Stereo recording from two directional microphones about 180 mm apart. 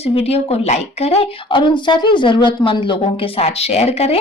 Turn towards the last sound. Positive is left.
turn(degrees=35)  # may be behind; listen again after turning